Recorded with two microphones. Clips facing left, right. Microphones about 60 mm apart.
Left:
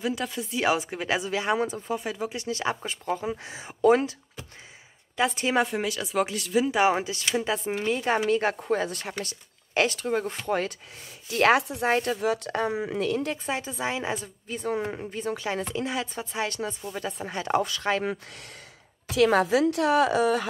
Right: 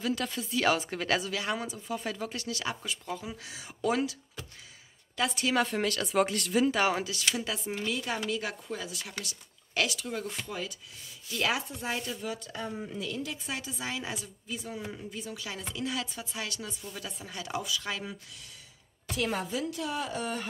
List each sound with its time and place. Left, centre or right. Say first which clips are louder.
0.0 s a woman's voice: left 3 dB; centre
2.0 s a woman's voice: left 4 dB; centre
5.7 s speech: left 1 dB; centre
6.8 s a woman's voice: left 5 dB; left
10.4 s a woman's voice: left 10 dB; left
13.0 s speech: left 9 dB; left
13.5 s speech: left 7 dB; left
15.0 s speech: left 9 dB; left
19.1 s a woman's voice: left 11 dB; left